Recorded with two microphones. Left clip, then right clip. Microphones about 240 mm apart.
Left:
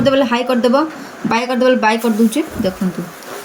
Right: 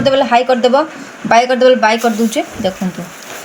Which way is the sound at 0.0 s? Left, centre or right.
Centre.